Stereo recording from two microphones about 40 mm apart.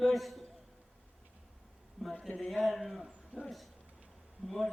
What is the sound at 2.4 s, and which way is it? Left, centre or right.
Speech, centre.